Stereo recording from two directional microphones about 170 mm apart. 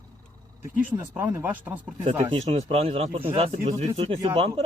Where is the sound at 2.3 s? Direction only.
35° right (ahead or behind).